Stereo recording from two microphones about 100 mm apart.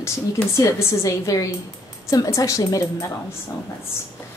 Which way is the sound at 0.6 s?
35° left (ahead or behind).